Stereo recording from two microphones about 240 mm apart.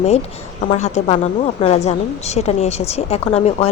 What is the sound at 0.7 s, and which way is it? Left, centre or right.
Speech, left.